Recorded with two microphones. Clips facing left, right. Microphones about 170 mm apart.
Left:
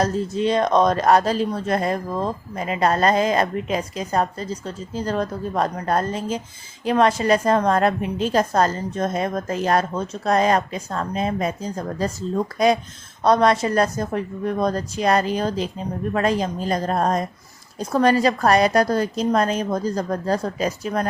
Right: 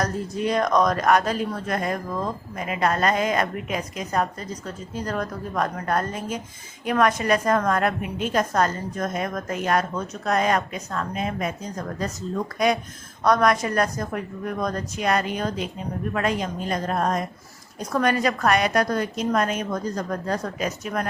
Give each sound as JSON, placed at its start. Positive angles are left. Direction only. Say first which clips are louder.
{"t": 0.0, "sound": "a woman's voice", "louder": "left 4 dB", "side_deg": 25}